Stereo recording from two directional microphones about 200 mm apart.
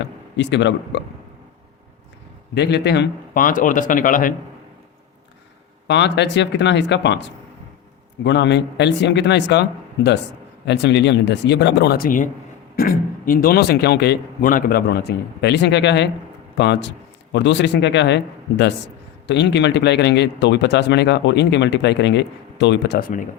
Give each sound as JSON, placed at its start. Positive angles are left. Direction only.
{"t": 0.0, "sound": "speech", "side_deg": 60}
{"t": 2.6, "sound": "a man's voice", "side_deg": 55}
{"t": 5.9, "sound": "a man's voice", "side_deg": 60}